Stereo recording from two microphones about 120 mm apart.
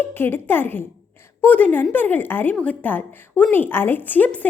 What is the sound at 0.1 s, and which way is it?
A woman's voice, 20° left (ahead or behind).